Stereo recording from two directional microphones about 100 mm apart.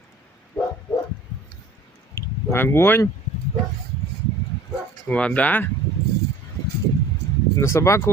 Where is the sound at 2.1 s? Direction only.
25° left (ahead or behind).